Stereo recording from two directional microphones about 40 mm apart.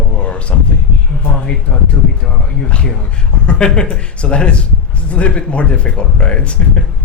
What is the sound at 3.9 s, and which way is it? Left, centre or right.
Speech, left.